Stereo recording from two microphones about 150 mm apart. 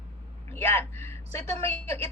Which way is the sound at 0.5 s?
15° left (ahead or behind).